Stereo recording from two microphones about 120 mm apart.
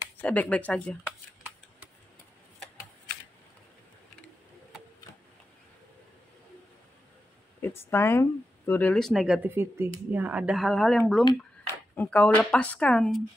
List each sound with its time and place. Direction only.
0.2 s speech: 10° left (ahead or behind)
1.0 s shuffling cards: 10° right (ahead or behind)
7.6 s speech: 20° left (ahead or behind)
8.9 s speech: centre (ahead or behind)
9.4 s speech: 20° right (ahead or behind); by 11.0 s centre (ahead or behind)
11.6 s speech: 15° left (ahead or behind)